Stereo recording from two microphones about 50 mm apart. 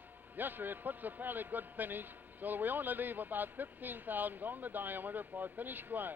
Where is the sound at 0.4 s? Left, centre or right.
Right.